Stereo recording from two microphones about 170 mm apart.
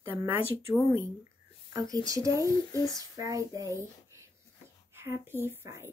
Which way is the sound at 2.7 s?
20° left (ahead or behind).